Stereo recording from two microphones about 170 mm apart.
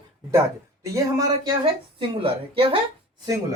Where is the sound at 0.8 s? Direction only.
20° right (ahead or behind).